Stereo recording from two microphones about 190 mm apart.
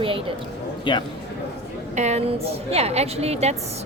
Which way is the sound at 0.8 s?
25° left (ahead or behind).